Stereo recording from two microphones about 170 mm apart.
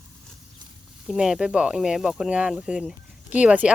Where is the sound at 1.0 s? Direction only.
5° right (ahead or behind).